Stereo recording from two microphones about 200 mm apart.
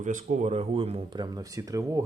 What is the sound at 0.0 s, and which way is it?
Speech, 40° right (ahead or behind).